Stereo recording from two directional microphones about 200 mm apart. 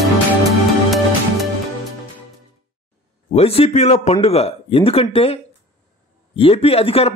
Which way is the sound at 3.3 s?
30° left (ahead or behind).